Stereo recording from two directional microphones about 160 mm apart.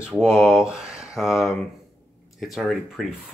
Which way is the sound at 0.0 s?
5° right (ahead or behind).